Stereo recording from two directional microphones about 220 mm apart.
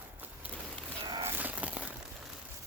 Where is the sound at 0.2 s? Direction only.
10° right (ahead or behind).